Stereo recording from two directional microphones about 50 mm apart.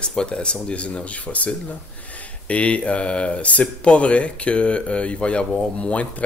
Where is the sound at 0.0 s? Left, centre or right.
Centre.